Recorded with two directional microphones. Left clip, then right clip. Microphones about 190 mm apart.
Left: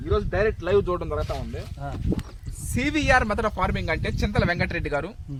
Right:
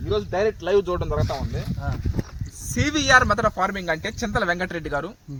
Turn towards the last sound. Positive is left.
turn(degrees=20)  # may be behind; listen again after turning